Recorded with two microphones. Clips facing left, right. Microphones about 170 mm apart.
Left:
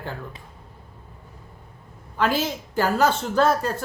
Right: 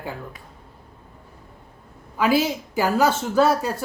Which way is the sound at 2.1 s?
10° right (ahead or behind).